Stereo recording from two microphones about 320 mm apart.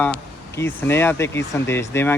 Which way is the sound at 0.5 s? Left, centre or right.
Centre.